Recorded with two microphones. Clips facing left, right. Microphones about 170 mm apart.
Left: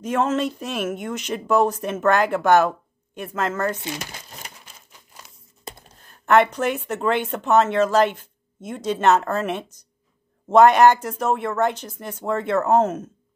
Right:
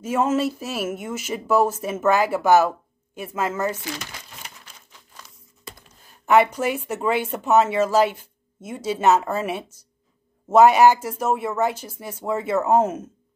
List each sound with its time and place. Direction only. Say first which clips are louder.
0.0 s speech: right 1 dB; 10° right (ahead or behind)
3.7 s speech: left 1 dB; 20° left (ahead or behind)
6.2 s speech: even; 10° right (ahead or behind)